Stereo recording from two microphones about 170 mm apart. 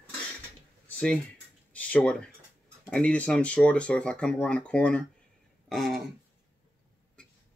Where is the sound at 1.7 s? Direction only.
10° left (ahead or behind).